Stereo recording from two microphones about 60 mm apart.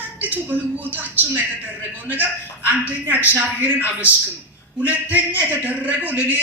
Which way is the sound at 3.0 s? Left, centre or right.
Right.